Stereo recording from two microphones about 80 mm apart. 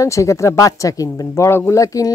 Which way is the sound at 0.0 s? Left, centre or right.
Left.